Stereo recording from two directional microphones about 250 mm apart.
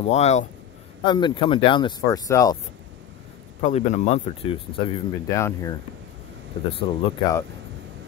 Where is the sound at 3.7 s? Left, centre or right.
Left.